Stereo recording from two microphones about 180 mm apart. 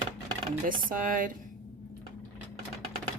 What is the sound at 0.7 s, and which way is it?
Speech, 50° right (ahead or behind).